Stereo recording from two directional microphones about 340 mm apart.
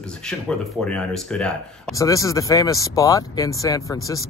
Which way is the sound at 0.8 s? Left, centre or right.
Centre.